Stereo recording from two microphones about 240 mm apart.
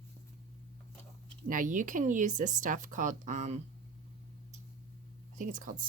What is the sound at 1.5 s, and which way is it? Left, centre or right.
Speech, right.